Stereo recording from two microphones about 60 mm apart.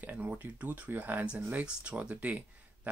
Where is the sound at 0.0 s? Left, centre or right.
Right.